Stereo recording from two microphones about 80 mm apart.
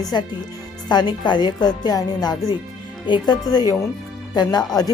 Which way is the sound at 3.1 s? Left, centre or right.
Left.